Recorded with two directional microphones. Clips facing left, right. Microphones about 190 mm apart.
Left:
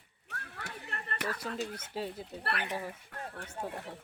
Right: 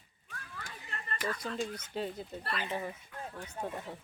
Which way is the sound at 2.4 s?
65° left (ahead or behind).